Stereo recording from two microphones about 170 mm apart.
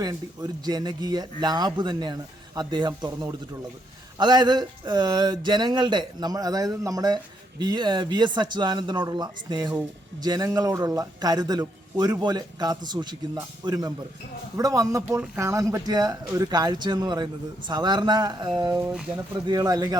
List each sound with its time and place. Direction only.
0.0 s a man's voice: 25° right (ahead or behind)
18.8 s speech: 5° right (ahead or behind)
19.3 s a man's voice: 25° right (ahead or behind)